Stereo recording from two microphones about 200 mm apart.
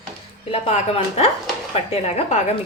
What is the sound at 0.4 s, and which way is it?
Speech, 30° left (ahead or behind).